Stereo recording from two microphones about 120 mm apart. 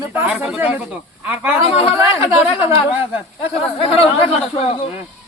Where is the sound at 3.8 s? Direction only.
50° left (ahead or behind).